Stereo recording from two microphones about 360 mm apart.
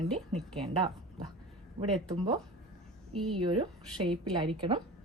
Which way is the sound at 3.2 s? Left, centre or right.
Right.